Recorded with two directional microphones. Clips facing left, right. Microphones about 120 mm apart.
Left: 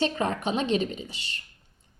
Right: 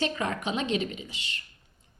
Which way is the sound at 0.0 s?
30° left (ahead or behind).